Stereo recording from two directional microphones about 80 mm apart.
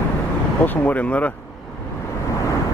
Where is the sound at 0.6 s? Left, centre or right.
Left.